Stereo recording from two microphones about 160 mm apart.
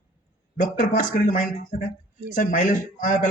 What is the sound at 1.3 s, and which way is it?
A man's voice, 50° left (ahead or behind).